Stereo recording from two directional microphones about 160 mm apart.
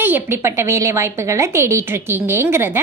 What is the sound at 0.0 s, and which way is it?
A woman's voice, 15° right (ahead or behind).